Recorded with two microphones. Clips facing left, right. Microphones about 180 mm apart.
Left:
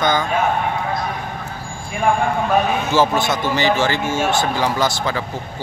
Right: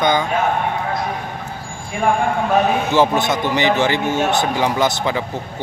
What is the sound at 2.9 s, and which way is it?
Speech, 20° right (ahead or behind).